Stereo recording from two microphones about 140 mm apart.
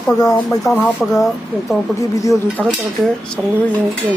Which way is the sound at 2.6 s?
Centre (ahead or behind).